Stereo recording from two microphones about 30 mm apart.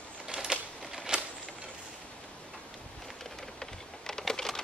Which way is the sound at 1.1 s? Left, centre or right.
Right.